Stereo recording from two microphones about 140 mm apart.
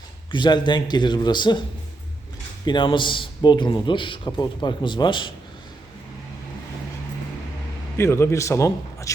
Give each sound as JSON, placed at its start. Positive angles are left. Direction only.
{"t": 0.3, "sound": "a man's voice", "side_deg": 35}
{"t": 2.6, "sound": "a man's voice", "side_deg": 35}
{"t": 7.9, "sound": "a man's voice", "side_deg": 20}